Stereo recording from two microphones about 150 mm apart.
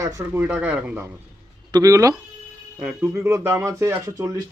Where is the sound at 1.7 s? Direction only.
25° right (ahead or behind).